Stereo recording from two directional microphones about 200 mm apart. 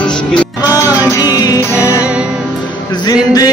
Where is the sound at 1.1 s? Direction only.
20° left (ahead or behind).